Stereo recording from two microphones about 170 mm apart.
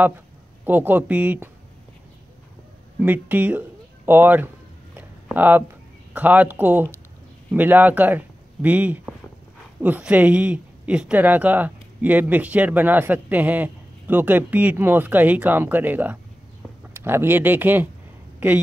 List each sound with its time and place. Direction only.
0.7 s speech: 10° right (ahead or behind)
3.0 s speech: 10° right (ahead or behind)
4.9 s a sound: 10° right (ahead or behind)
6.1 s speech: 10° right (ahead or behind)